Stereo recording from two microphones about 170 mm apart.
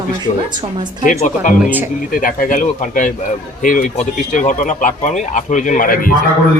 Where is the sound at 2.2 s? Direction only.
50° left (ahead or behind).